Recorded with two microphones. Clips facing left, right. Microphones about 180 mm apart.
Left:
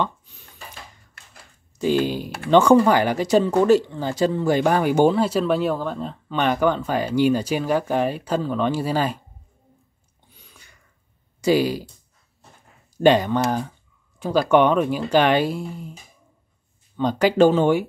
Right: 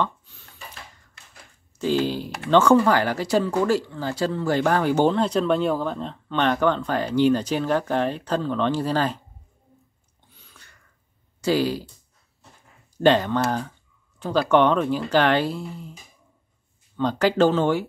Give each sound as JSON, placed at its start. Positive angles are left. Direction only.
{"t": 0.0, "sound": "a sound", "side_deg": 15}
{"t": 1.8, "sound": "speech", "side_deg": 15}
{"t": 10.3, "sound": "throat clearing", "side_deg": 15}
{"t": 11.4, "sound": "speech", "side_deg": 15}
{"t": 12.9, "sound": "speech", "side_deg": 15}
{"t": 16.9, "sound": "speech", "side_deg": 15}